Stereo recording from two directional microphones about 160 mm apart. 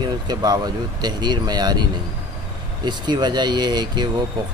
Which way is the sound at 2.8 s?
25° right (ahead or behind).